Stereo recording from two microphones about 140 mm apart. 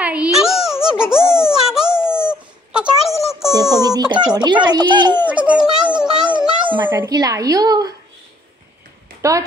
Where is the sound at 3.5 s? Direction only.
25° right (ahead or behind).